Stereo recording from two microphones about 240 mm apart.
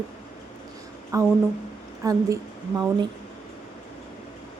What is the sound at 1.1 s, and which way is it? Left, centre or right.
A woman's voice, centre.